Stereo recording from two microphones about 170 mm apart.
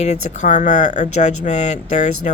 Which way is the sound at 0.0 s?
40° left (ahead or behind).